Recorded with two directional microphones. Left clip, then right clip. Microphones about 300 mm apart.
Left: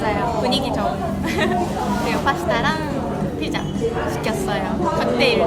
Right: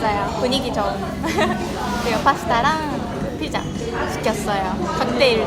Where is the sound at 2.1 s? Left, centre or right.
Centre.